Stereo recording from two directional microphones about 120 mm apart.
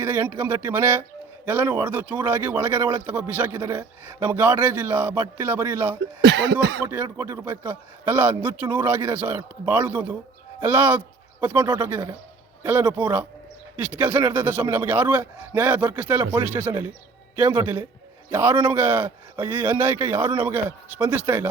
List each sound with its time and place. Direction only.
0.0 s a man's voice: 15° right (ahead or behind)